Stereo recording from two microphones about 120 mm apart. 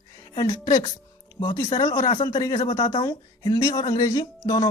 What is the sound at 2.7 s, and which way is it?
Speech, 65° left (ahead or behind).